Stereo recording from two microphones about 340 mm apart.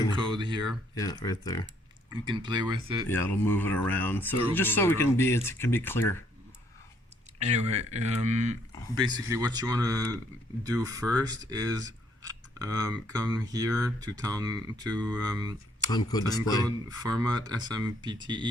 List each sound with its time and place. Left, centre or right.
0.2 s a sound: centre
0.7 s speech: centre
2.2 s speech: centre
3.1 s speech: centre
7.3 s speech: centre
15.9 s speech: centre
16.6 s speech: centre